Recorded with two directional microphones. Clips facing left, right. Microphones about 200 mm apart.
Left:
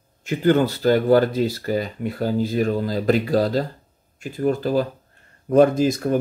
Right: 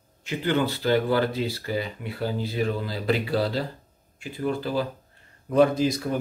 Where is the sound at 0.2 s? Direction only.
45° left (ahead or behind).